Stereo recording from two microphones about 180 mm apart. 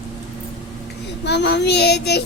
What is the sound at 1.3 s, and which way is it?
Child singing, 70° left (ahead or behind).